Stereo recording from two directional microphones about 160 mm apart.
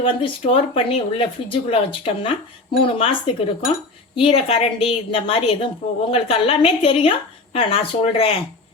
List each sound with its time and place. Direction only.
0.0 s speech: 35° left (ahead or behind)